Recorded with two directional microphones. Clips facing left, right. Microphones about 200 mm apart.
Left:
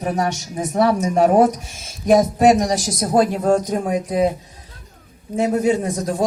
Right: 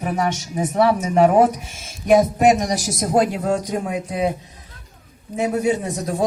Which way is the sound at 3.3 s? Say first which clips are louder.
Left 4 dB; 50° left (ahead or behind).